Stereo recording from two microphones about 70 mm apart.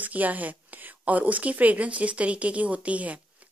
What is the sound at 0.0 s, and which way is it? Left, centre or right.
A woman's voice, right.